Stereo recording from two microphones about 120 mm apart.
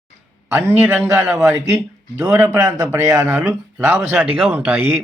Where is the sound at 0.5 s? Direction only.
15° right (ahead or behind).